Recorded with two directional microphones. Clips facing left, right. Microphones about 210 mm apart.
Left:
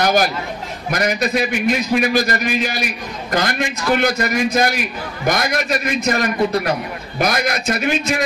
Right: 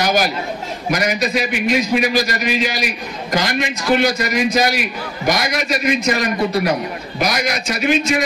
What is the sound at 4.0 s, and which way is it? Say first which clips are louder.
A man's voice: right 1 dB; 55° left (ahead or behind).